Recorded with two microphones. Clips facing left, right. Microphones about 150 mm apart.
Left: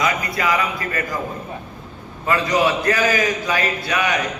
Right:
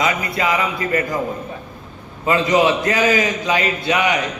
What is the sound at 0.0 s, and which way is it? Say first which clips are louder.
A man's voice: right 1 dB; 25° right (ahead or behind).